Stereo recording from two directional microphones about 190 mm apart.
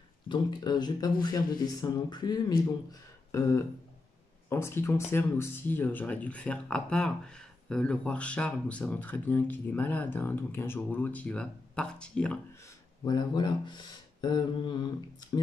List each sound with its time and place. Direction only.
0.3 s speech: 25° left (ahead or behind)
3.3 s a sound: 15° left (ahead or behind)
4.5 s speech: 15° left (ahead or behind)
13.0 s speech: 20° left (ahead or behind)